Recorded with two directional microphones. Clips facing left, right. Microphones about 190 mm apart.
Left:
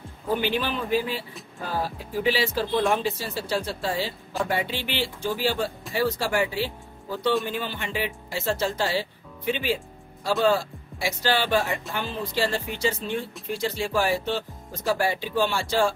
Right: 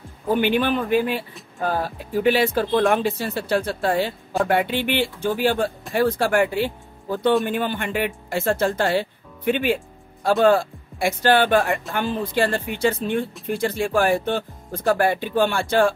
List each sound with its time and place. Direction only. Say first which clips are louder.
0.4 s speech: right 6 dB; 55° right (ahead or behind)